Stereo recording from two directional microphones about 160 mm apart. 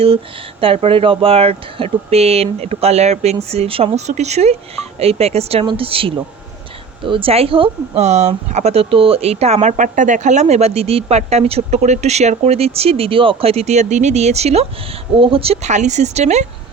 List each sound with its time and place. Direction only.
0.6 s speech: 35° right (ahead or behind)